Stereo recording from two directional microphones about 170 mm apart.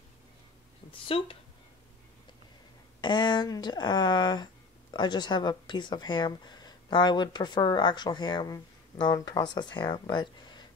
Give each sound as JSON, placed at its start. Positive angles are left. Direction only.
{"t": 1.0, "sound": "speech", "side_deg": 35}
{"t": 3.0, "sound": "speech", "side_deg": 25}